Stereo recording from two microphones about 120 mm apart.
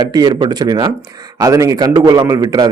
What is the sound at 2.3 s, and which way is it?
Speech, 30° right (ahead or behind).